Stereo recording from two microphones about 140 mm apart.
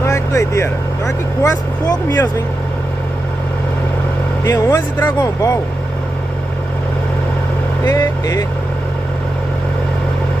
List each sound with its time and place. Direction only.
0.0 s speech: 20° left (ahead or behind)
4.5 s speech: 20° left (ahead or behind)
7.8 s speech: 25° left (ahead or behind)